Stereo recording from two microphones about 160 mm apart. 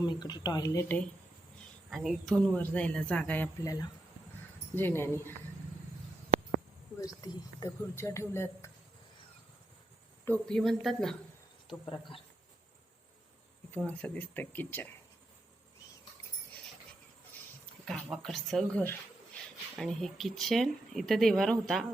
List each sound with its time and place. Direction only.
0.0 s speech: 25° left (ahead or behind)
1.9 s a woman's voice: centre (ahead or behind)
4.7 s a woman's voice: 15° left (ahead or behind)
7.0 s a woman's voice: 25° left (ahead or behind)
10.2 s speech: 5° left (ahead or behind)
11.9 s speech: 30° left (ahead or behind)
13.7 s a woman's voice: 10° left (ahead or behind)
17.8 s speech: 5° left (ahead or behind)